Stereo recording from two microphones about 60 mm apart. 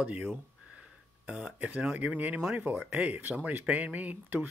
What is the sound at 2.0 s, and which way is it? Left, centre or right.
Speech, right.